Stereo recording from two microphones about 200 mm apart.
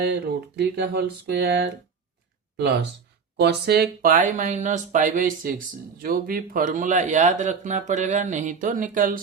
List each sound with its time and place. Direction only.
0.0 s speech: 55° right (ahead or behind)